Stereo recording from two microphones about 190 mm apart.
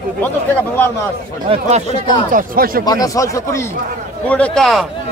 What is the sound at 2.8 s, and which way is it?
Speech, 20° left (ahead or behind).